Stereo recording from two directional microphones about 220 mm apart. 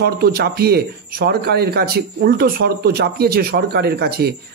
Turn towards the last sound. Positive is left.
turn(degrees=-45)  # may be behind; listen again after turning